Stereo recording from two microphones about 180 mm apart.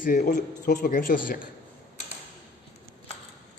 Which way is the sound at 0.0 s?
45° left (ahead or behind).